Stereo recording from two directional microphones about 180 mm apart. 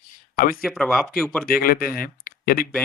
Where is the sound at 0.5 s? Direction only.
5° left (ahead or behind).